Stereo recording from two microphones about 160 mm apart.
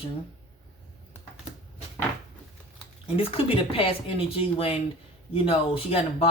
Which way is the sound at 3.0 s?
35° left (ahead or behind).